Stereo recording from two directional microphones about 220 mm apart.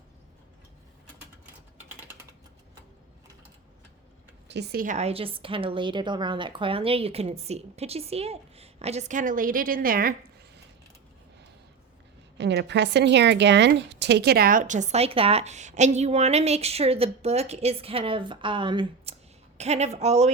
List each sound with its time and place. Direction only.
4.4 s a woman's voice: 50° right (ahead or behind)
12.4 s a woman's voice: 50° right (ahead or behind); by 20.3 s 30° right (ahead or behind)